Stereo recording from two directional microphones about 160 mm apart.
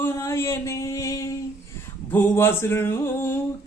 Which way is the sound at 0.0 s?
15° left (ahead or behind).